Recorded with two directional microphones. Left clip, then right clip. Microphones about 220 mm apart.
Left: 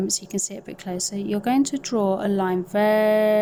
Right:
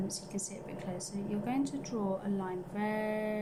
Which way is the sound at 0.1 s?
45° left (ahead or behind).